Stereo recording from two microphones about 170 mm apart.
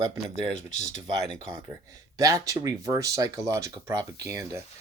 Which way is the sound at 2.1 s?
20° right (ahead or behind).